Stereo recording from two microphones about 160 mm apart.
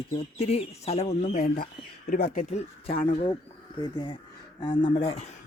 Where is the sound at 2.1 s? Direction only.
60° left (ahead or behind).